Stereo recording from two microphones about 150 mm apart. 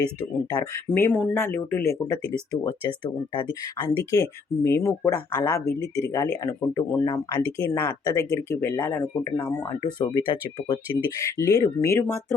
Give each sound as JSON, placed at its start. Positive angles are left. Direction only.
{"t": 0.6, "sound": "speech", "side_deg": 15}
{"t": 1.1, "sound": "speech", "side_deg": 5}
{"t": 1.4, "sound": "speech", "side_deg": 15}
{"t": 10.1, "sound": "speech", "side_deg": 30}
{"t": 11.2, "sound": "speech", "side_deg": 20}